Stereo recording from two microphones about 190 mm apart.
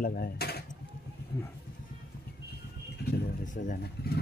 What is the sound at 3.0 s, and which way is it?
Vehicle, 60° left (ahead or behind).